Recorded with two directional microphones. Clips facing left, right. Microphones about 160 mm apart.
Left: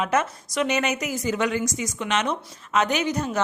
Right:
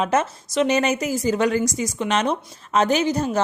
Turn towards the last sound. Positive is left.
turn(degrees=-30)  # may be behind; listen again after turning